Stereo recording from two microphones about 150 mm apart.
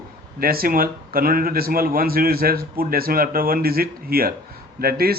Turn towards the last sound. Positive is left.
turn(degrees=-90)